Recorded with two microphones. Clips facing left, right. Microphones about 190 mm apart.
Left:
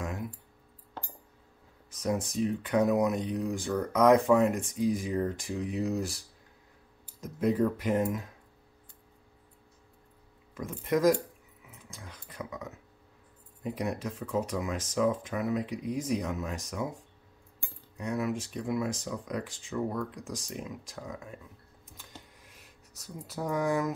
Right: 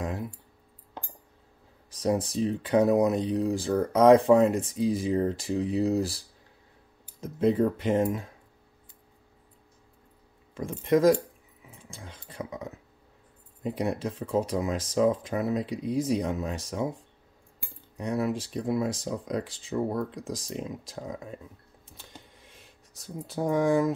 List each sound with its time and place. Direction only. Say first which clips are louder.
1.9 s speech: right 4 dB; 30° right (ahead or behind)
10.5 s speech: right 5 dB; 30° right (ahead or behind)
11.6 s a sound: right 3 dB; 30° right (ahead or behind)
13.6 s speech: right 4 dB; 30° right (ahead or behind)
17.9 s speech: right 3 dB; 35° right (ahead or behind)
21.8 s a sound: right 1 dB; 30° right (ahead or behind)